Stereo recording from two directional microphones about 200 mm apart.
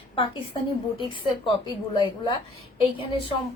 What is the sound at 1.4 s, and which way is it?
Speech, 25° left (ahead or behind).